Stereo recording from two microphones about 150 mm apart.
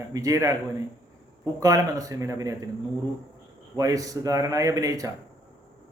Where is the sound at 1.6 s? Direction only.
20° right (ahead or behind).